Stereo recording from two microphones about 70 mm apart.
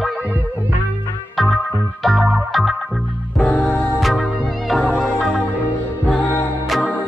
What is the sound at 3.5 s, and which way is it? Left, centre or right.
Music, centre.